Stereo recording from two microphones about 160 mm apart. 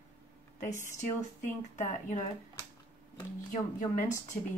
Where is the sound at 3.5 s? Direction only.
55° left (ahead or behind).